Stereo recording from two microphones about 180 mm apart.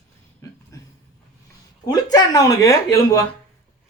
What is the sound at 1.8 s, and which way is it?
Speech, 20° left (ahead or behind).